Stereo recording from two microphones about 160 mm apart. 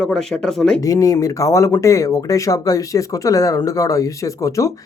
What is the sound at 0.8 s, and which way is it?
Speech, 20° left (ahead or behind).